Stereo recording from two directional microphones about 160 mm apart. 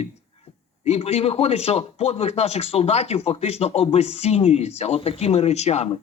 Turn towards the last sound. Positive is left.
turn(degrees=45)  # may be behind; listen again after turning